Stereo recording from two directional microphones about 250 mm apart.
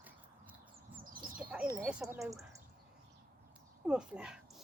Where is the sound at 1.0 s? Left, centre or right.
Right.